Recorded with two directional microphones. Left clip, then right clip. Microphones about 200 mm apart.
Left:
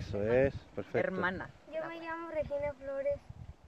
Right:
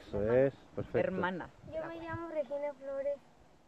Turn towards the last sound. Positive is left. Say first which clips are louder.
# left 1 dB
turn(degrees=0)  # may be behind; listen again after turning